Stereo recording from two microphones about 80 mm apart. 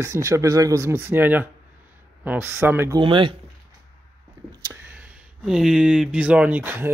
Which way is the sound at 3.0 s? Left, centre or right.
Right.